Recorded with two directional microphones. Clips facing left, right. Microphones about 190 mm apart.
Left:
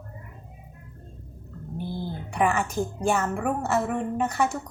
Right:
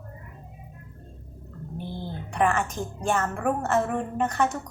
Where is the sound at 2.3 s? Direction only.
10° left (ahead or behind).